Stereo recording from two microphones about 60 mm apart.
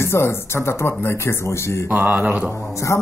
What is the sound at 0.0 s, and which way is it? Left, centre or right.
Speech, left.